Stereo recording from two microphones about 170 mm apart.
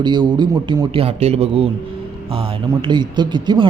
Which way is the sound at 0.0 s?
25° right (ahead or behind).